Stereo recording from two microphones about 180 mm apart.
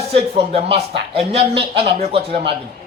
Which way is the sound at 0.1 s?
30° right (ahead or behind).